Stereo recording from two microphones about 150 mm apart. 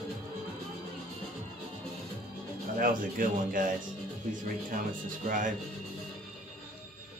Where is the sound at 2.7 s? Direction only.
70° right (ahead or behind).